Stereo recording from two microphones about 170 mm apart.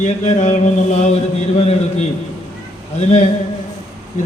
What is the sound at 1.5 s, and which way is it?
Speech, 40° left (ahead or behind).